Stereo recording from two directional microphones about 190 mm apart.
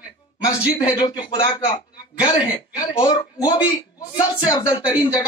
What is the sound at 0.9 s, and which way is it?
Speech, 20° left (ahead or behind).